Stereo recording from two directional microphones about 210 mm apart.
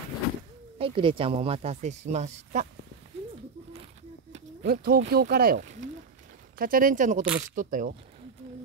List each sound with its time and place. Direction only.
0.7 s speech: 25° right (ahead or behind)
4.3 s a sound: 45° right (ahead or behind)
5.0 s speech: 45° right (ahead or behind)